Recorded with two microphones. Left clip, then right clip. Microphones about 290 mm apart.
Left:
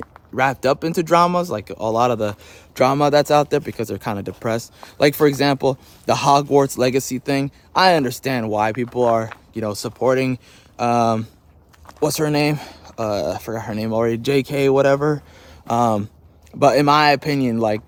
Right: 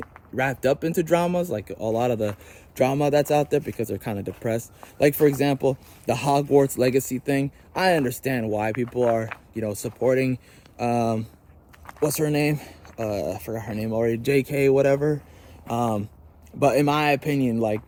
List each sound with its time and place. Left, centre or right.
0.0 s a man's voice: centre